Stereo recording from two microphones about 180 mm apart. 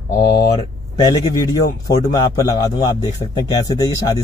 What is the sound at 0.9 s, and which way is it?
A man's voice, 20° left (ahead or behind).